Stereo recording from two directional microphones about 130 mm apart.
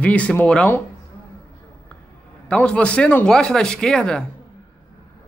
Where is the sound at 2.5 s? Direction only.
10° left (ahead or behind).